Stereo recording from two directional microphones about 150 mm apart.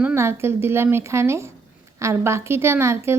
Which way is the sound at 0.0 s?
15° right (ahead or behind).